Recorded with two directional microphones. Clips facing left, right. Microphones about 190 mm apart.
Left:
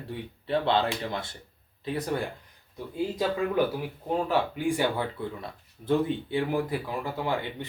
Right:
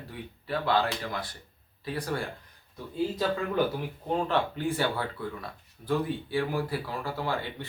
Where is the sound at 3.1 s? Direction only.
10° left (ahead or behind).